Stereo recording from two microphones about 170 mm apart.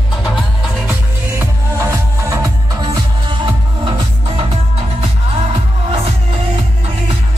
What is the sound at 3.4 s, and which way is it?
Music, 30° right (ahead or behind).